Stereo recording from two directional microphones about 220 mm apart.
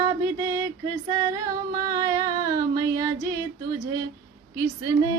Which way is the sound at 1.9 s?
15° right (ahead or behind).